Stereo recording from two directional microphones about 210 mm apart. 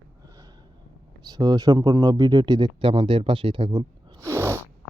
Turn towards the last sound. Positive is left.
turn(degrees=-10)  # may be behind; listen again after turning